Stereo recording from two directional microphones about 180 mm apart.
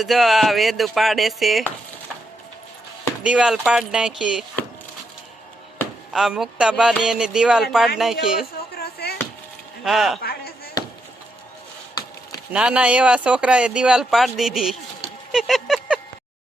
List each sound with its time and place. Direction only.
0.0 s speech: centre (ahead or behind)
3.2 s speech: 5° right (ahead or behind)
6.1 s speech: centre (ahead or behind)
8.7 s chop: 60° left (ahead or behind)
9.8 s speech: centre (ahead or behind)
12.5 s speech: 5° right (ahead or behind)